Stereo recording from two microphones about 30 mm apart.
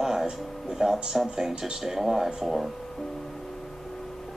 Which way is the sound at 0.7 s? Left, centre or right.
Centre.